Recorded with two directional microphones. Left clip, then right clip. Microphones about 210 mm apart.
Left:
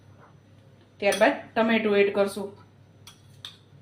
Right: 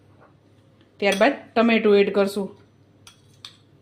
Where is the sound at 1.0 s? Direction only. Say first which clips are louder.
Right 2 dB; 50° right (ahead or behind).